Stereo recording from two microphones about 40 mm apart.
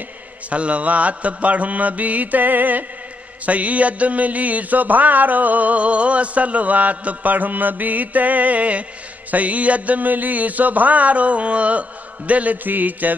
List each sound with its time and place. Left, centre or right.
0.5 s music: right
3.4 s music: right
12.6 s mantra: right